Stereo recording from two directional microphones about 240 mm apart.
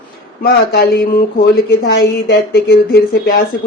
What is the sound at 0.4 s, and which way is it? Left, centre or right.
Speech, left.